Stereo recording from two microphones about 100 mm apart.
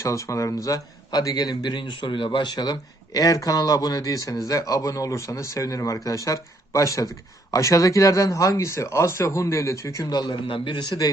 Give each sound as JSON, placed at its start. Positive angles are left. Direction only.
{"t": 0.0, "sound": "speech", "side_deg": 30}